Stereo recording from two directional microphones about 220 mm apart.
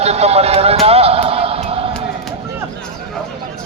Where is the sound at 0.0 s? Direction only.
30° right (ahead or behind).